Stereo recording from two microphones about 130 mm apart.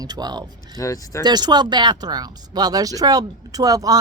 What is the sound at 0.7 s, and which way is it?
Speech, 25° left (ahead or behind).